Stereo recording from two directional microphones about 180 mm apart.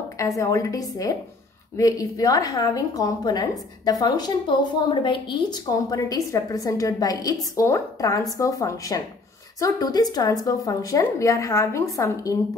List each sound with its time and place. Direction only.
0.4 s a woman's voice: 15° left (ahead or behind)